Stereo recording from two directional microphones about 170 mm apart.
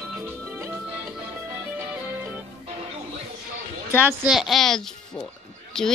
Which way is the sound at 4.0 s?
5° right (ahead or behind).